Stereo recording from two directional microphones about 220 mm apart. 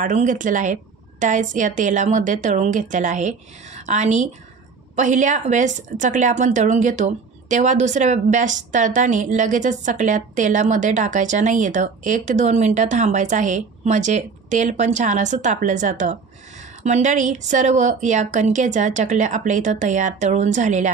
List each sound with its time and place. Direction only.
0.0 s a woman's voice: 35° right (ahead or behind)